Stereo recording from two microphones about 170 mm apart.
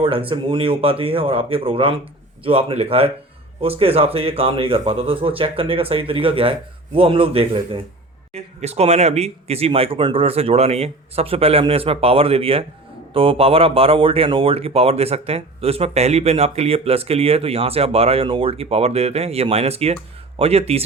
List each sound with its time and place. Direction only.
0.0 s speech: 30° right (ahead or behind)